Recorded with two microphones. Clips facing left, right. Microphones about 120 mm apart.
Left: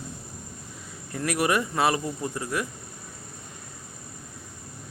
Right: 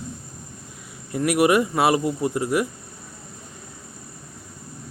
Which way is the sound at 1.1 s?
15° right (ahead or behind).